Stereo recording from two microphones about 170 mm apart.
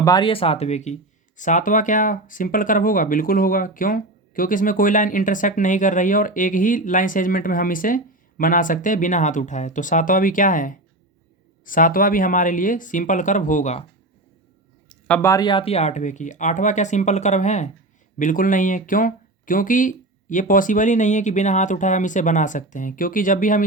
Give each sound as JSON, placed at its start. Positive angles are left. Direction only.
{"t": 0.0, "sound": "speech", "side_deg": 25}
{"t": 14.8, "sound": "speech", "side_deg": 10}